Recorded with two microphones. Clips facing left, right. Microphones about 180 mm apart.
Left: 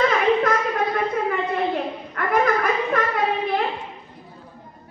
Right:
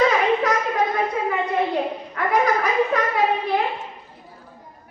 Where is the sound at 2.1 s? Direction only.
55° left (ahead or behind).